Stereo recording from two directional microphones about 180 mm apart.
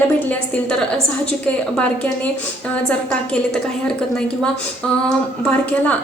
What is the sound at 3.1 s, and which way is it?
Speech, 5° left (ahead or behind).